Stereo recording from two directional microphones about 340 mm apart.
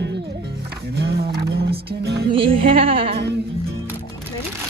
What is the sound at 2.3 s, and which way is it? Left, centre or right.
Music, centre.